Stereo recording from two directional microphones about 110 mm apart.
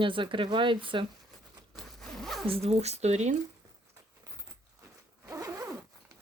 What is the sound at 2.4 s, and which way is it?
Speech, 65° right (ahead or behind).